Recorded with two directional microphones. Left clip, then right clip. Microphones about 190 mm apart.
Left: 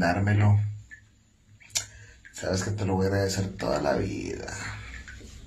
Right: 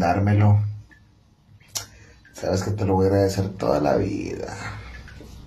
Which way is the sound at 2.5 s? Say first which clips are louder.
Right 6 dB; 20° right (ahead or behind).